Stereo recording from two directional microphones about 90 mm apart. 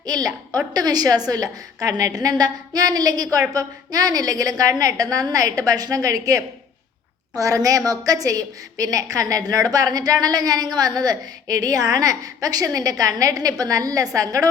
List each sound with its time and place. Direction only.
0.0 s a woman's voice: 45° right (ahead or behind)